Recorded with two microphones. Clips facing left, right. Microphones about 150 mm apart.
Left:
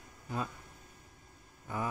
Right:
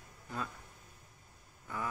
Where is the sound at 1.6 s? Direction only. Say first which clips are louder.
Left 3 dB; 25° left (ahead or behind).